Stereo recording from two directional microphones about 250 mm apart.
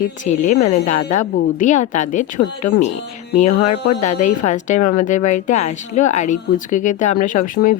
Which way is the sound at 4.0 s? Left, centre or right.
Left.